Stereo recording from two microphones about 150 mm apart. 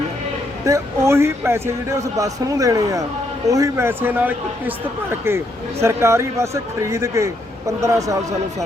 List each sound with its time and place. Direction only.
0.6 s a man's voice: 20° right (ahead or behind)
5.8 s a man's voice: 20° right (ahead or behind)